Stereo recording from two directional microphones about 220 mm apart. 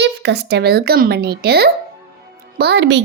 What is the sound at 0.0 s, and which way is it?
Speech, 50° right (ahead or behind).